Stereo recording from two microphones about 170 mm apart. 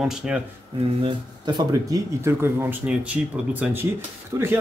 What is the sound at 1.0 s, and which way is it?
Speech, 25° right (ahead or behind).